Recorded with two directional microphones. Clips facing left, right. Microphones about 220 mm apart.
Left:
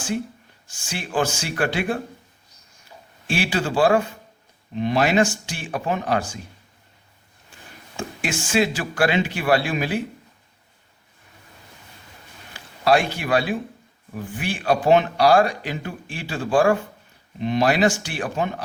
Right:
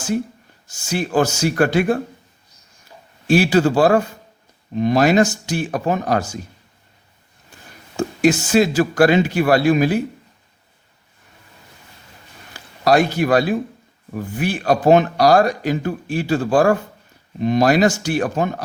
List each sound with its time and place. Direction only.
0.7 s speech: 40° right (ahead or behind)
3.2 s speech: 40° right (ahead or behind)
7.9 s speech: 40° right (ahead or behind)
12.5 s a man's voice: 40° right (ahead or behind)